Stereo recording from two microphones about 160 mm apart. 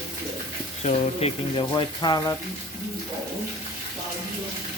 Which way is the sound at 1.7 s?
25° left (ahead or behind).